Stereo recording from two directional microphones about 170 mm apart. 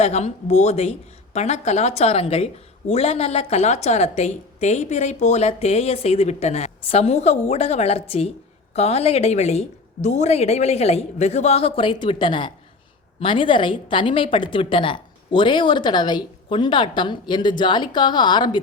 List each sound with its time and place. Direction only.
0.0 s a woman's voice: 40° left (ahead or behind); by 18.6 s 25° left (ahead or behind)